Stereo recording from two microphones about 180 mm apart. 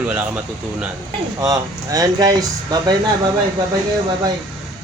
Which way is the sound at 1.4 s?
20° right (ahead or behind).